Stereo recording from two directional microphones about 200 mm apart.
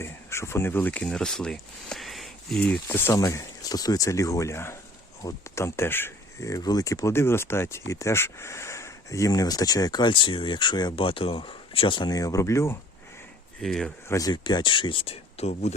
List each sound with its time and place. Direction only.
0.0 s speech: 15° left (ahead or behind)
13.6 s speech: centre (ahead or behind)
14.1 s speech: 20° left (ahead or behind)